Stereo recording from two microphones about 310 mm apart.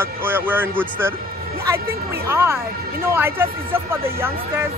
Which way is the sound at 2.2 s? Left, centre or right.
Centre.